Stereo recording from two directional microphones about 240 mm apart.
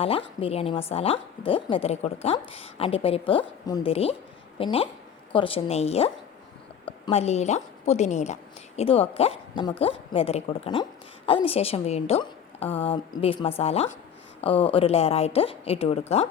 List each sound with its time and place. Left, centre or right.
0.0 s a woman's voice: left